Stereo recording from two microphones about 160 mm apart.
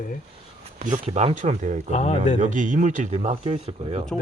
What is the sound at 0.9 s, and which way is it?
Speech, 45° right (ahead or behind).